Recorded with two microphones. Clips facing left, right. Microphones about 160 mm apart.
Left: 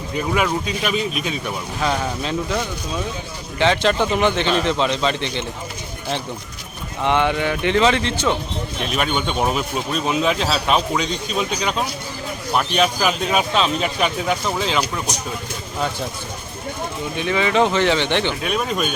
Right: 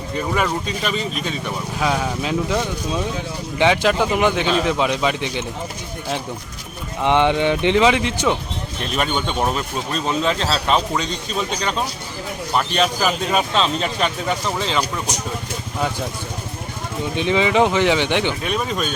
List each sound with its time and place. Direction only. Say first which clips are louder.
0.3 s speech: left 2 dB; 5° left (ahead or behind)
1.8 s speech: right 1 dB; 5° right (ahead or behind)
7.0 s speech: right 2 dB; 20° right (ahead or behind)
8.8 s speech: even; 5° left (ahead or behind)
17.2 s speech: right 1 dB; 20° right (ahead or behind)
18.4 s speech: left 1 dB; 5° left (ahead or behind)